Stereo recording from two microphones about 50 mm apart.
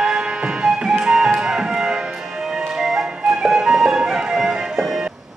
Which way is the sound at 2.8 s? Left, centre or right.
Centre.